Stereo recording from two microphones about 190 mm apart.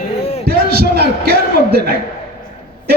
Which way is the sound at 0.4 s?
55° right (ahead or behind).